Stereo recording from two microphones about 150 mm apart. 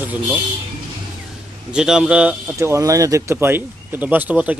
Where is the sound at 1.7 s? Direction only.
5° right (ahead or behind).